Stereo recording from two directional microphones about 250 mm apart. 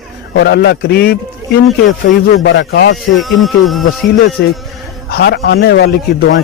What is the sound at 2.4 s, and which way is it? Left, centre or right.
Speech, left.